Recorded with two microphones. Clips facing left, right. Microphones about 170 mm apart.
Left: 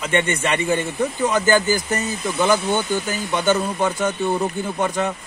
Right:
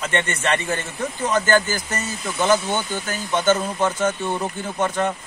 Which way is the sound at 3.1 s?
15° left (ahead or behind).